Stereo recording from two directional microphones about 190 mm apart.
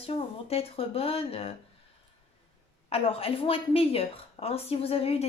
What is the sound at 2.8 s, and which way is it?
A woman's voice, 30° left (ahead or behind).